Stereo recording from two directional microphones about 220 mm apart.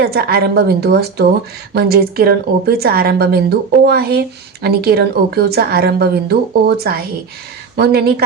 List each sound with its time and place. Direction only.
0.0 s a woman's voice: 45° right (ahead or behind)